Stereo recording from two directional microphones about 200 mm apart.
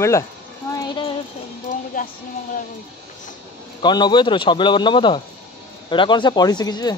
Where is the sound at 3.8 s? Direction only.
20° left (ahead or behind).